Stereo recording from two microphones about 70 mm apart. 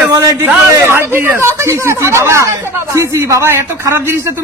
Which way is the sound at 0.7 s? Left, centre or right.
Right.